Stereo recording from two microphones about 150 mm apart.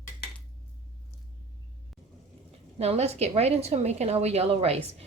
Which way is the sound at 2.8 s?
45° right (ahead or behind).